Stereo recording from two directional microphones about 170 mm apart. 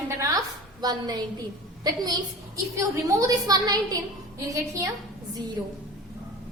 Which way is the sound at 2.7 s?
20° right (ahead or behind).